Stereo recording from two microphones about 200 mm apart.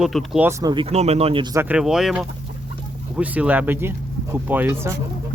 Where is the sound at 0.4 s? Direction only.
20° right (ahead or behind).